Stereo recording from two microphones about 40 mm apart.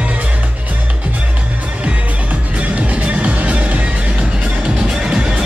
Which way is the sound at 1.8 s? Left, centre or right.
Right.